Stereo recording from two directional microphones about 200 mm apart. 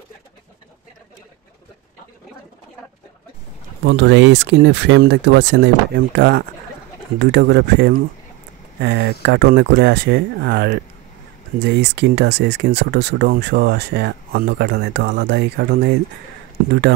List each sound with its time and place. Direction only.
3.8 s speech: 65° right (ahead or behind)